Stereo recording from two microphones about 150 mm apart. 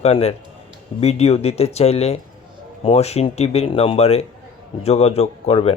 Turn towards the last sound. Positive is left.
turn(degrees=40)  # may be behind; listen again after turning